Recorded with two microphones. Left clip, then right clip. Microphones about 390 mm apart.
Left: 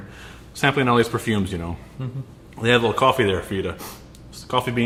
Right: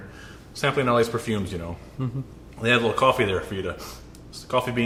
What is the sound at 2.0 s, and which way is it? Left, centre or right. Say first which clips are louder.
Speech: right 5 dB; right.